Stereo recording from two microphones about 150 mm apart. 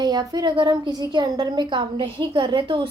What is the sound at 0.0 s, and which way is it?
A woman's voice, 25° right (ahead or behind).